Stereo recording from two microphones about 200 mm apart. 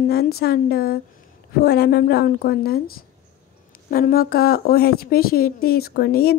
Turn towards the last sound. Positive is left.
turn(degrees=50)  # may be behind; listen again after turning